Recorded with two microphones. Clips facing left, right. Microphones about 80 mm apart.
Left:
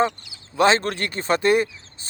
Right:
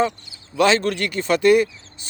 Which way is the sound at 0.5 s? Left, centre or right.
Left.